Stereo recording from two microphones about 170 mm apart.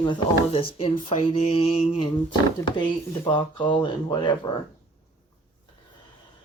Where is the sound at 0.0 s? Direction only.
30° left (ahead or behind).